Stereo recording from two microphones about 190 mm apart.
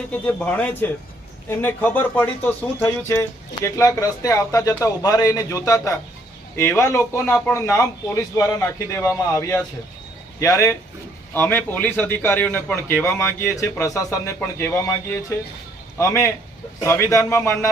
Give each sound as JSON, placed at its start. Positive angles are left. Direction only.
{"t": 0.1, "sound": "a man's voice", "side_deg": 5}